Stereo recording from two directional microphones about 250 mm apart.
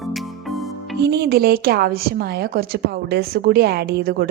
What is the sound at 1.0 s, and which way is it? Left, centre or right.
A woman's voice, right.